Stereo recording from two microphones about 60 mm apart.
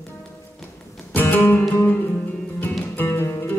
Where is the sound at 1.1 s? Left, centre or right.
Left.